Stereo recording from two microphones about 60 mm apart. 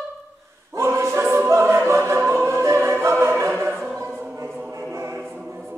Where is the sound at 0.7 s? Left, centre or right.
Right.